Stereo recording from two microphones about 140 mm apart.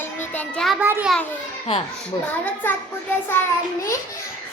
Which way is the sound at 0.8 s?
15° right (ahead or behind).